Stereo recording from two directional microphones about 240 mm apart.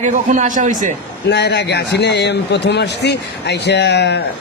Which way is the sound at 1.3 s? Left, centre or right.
Left.